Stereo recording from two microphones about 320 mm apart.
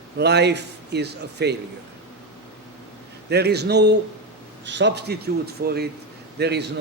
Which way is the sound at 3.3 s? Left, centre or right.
Right.